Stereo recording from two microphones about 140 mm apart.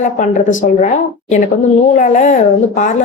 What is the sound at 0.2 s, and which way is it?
A woman's voice, 65° left (ahead or behind).